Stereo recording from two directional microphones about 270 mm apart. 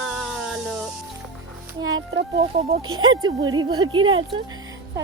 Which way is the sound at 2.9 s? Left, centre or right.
Centre.